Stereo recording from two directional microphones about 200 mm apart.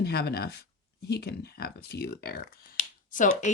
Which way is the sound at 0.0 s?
50° left (ahead or behind).